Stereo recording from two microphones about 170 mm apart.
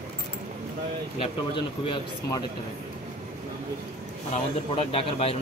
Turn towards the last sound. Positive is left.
turn(degrees=35)  # may be behind; listen again after turning